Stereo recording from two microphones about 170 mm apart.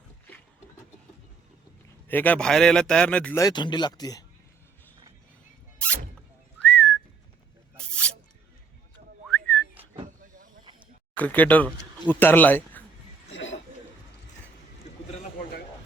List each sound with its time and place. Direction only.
2.0 s speech: 10° left (ahead or behind)
3.4 s speech: 25° left (ahead or behind)
6.6 s whistling: 5° left (ahead or behind)
9.3 s whistling: 5° left (ahead or behind)
10.1 s vehicle: 50° right (ahead or behind)
11.2 s speech: 10° left (ahead or behind)
13.3 s a sound: 90° left